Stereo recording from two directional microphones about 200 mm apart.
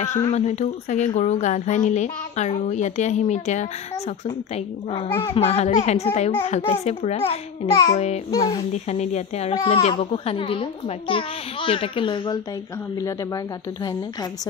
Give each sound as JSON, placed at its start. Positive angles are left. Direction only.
{"t": 0.3, "sound": "a woman's voice", "side_deg": 35}
{"t": 5.1, "sound": "a child's voice", "side_deg": 20}
{"t": 5.4, "sound": "a woman's voice", "side_deg": 30}
{"t": 8.3, "sound": "a child's voice", "side_deg": 20}
{"t": 8.7, "sound": "a woman's voice", "side_deg": 35}